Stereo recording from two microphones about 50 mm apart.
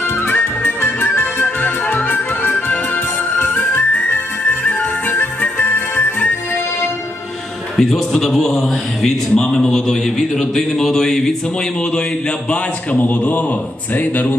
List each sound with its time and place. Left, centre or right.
0.3 s music: left
3.9 s music: left
7.7 s a man's voice: centre
12.4 s a man's voice: left